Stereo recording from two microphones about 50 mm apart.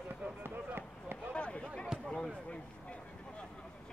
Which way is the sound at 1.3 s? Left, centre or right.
Left.